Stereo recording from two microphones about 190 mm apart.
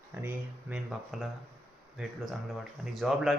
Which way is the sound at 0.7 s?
Centre (ahead or behind).